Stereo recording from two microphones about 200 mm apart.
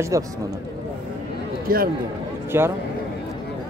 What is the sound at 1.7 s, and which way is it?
Speech, 45° right (ahead or behind).